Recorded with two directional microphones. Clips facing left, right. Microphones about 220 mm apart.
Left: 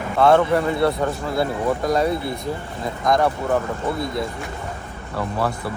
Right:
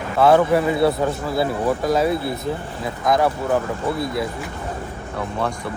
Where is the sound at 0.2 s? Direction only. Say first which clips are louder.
Right 1 dB; 5° right (ahead or behind).